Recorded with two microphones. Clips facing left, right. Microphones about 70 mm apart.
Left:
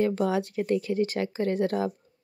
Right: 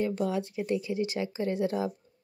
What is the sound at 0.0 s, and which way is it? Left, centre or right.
Speech, left.